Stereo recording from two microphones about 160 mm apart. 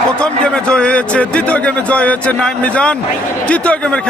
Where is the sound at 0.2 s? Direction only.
5° left (ahead or behind).